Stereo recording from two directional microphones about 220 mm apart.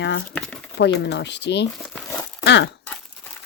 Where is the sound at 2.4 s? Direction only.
55° left (ahead or behind).